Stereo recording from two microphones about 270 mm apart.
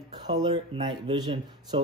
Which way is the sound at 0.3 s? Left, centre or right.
Centre.